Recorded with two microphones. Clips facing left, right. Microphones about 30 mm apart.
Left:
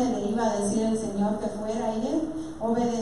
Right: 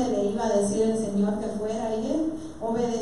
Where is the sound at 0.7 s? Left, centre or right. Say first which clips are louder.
Right 2 dB; centre.